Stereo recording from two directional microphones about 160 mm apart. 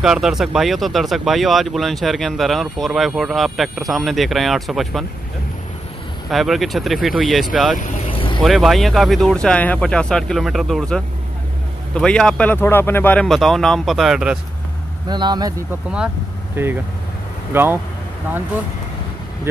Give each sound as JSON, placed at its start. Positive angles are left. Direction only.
{"t": 0.0, "sound": "speech", "side_deg": -5}
{"t": 6.3, "sound": "speech", "side_deg": 0}
{"t": 7.8, "sound": "vehicle", "side_deg": 35}
{"t": 8.4, "sound": "speech", "side_deg": 0}
{"t": 15.0, "sound": "speech", "side_deg": -25}
{"t": 16.6, "sound": "speech", "side_deg": -15}